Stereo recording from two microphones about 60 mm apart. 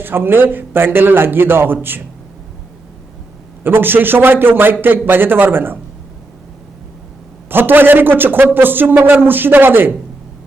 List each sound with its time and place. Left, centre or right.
0.0 s a man's voice: right
3.6 s a man's voice: right
7.5 s a man's voice: right